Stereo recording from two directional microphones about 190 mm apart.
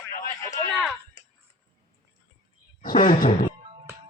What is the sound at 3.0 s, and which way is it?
Speech, 45° left (ahead or behind).